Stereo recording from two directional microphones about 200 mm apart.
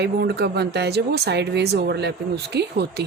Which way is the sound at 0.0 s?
55° right (ahead or behind).